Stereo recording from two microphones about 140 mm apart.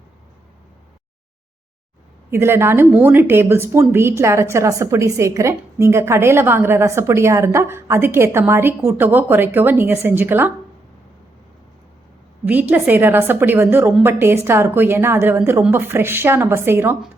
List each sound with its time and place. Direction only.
2.3 s a woman's voice: 15° right (ahead or behind)
12.5 s a woman's voice: 15° right (ahead or behind)